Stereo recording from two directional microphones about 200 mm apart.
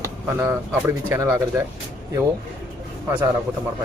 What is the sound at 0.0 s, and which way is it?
Speech, 10° right (ahead or behind).